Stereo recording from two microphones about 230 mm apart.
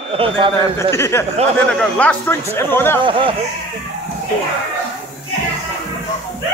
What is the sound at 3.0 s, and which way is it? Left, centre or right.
Speech, right.